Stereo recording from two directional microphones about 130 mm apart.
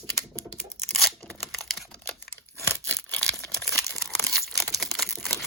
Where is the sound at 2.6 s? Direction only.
15° left (ahead or behind).